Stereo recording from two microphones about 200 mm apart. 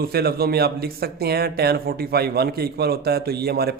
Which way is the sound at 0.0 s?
50° right (ahead or behind).